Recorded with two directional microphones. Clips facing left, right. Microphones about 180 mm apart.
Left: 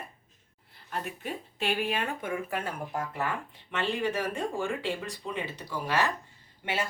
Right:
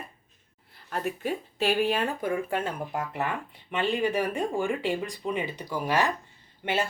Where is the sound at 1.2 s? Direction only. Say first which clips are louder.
Right 6 dB; 40° right (ahead or behind); by 6.1 s 15° right (ahead or behind).